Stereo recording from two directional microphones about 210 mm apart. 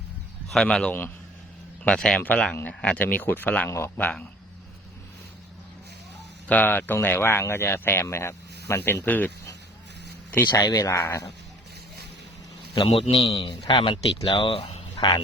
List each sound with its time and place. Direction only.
0.4 s a man's voice: centre (ahead or behind)
6.5 s speech: 10° left (ahead or behind)
10.3 s speech: 20° left (ahead or behind)
12.7 s a man's voice: 25° left (ahead or behind)